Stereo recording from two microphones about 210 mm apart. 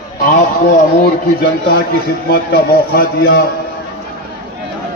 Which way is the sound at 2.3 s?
45° left (ahead or behind).